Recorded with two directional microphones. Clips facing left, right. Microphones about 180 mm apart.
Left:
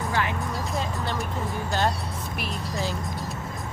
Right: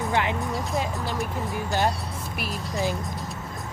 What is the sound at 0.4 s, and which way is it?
Music, centre (ahead or behind).